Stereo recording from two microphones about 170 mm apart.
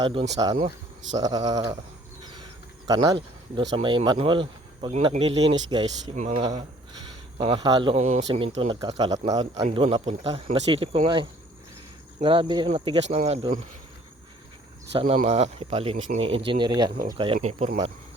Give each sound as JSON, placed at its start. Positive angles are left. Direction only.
{"t": 0.0, "sound": "speech", "side_deg": -30}
{"t": 6.1, "sound": "speech", "side_deg": -45}
{"t": 7.9, "sound": "speech", "side_deg": -45}
{"t": 8.5, "sound": "speech", "side_deg": -30}
{"t": 9.7, "sound": "speech", "side_deg": -35}
{"t": 14.9, "sound": "speech", "side_deg": -40}